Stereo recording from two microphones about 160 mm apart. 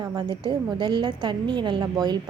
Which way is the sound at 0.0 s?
25° right (ahead or behind).